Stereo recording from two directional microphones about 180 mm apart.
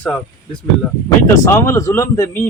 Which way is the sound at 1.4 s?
15° left (ahead or behind).